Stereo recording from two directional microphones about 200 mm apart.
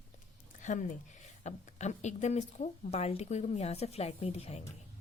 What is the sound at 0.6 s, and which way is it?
Speech, 40° left (ahead or behind).